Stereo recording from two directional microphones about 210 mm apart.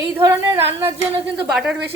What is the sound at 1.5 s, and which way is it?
Speech, 5° right (ahead or behind).